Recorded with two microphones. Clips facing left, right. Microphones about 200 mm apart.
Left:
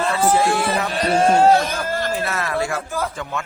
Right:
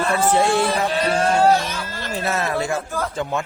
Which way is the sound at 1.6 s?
50° left (ahead or behind).